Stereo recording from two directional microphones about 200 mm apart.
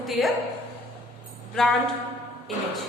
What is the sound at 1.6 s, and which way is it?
Speech, centre (ahead or behind).